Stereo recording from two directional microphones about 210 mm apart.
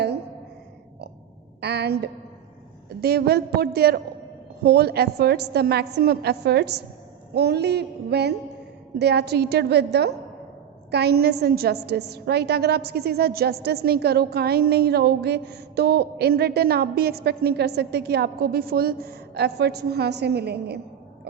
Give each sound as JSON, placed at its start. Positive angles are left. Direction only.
{"t": 1.6, "sound": "a woman's voice", "side_deg": -50}